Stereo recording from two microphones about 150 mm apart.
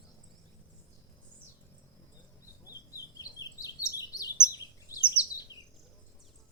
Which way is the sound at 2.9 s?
25° left (ahead or behind).